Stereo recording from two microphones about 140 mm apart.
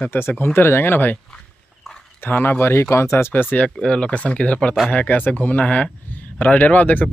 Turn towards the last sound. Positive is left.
turn(degrees=10)  # may be behind; listen again after turning